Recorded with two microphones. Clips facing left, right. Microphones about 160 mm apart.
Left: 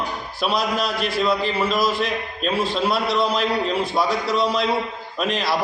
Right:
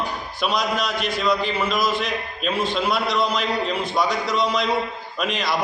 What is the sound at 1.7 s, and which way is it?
Speech, 30° left (ahead or behind).